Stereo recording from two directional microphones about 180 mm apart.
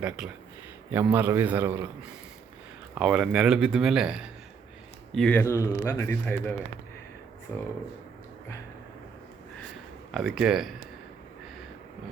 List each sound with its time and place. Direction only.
0.9 s a man's voice: 10° right (ahead or behind)
5.4 s speech: 15° left (ahead or behind)
7.5 s speech: 15° left (ahead or behind)
10.1 s speech: centre (ahead or behind)